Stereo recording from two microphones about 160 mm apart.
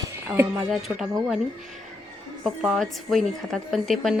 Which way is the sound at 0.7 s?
Centre (ahead or behind).